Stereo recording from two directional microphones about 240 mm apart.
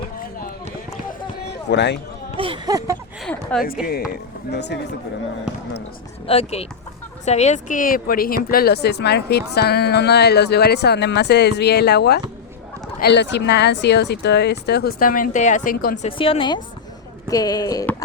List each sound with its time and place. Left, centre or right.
0.2 s a sound: left
1.7 s speech: left
2.4 s speech: centre
4.5 s speech: left
6.2 s a woman's voice: left
16.0 s a woman's voice: left